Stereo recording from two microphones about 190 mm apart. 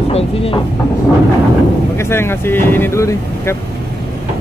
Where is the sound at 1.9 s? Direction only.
15° left (ahead or behind).